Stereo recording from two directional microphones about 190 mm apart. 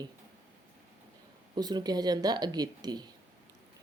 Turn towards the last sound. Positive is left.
turn(degrees=-20)  # may be behind; listen again after turning